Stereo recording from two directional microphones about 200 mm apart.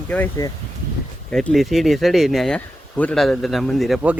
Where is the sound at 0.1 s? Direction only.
15° left (ahead or behind).